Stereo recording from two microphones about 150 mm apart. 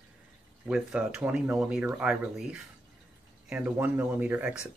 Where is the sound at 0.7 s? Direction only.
5° right (ahead or behind).